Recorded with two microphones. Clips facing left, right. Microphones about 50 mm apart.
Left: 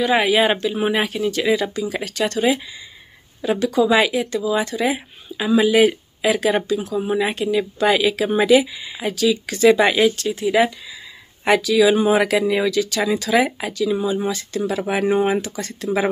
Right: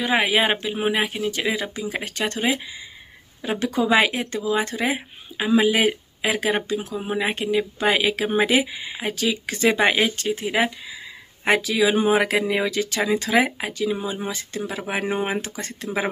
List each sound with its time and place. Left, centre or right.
0.0 s speech: right
3.5 s speech: right
15.4 s speech: right